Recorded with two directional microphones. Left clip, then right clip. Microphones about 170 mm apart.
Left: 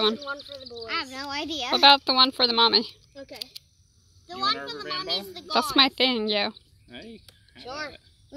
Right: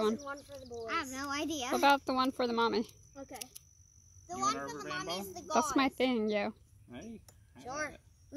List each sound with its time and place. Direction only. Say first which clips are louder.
0.0 s a woman's voice: left 8 dB; centre (ahead or behind)
0.8 s speech: left 6 dB; 45° right (ahead or behind)
1.8 s speech: left 11 dB; 10° left (ahead or behind)
4.8 s a child's voice: left 12 dB; 35° right (ahead or behind)
5.5 s a woman's voice: left 9 dB; 5° left (ahead or behind)
6.9 s speech: left 6 dB; 30° right (ahead or behind)